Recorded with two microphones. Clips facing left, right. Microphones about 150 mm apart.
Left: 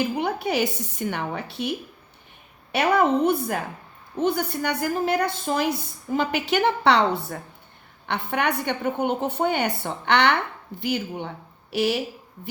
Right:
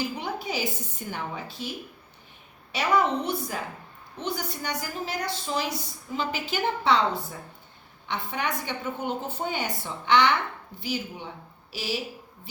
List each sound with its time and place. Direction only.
0.0 s a woman's voice: 60° left (ahead or behind)
2.7 s a woman's voice: 60° left (ahead or behind)